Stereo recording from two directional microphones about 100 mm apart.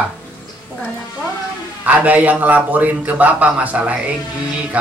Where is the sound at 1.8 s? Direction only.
15° right (ahead or behind).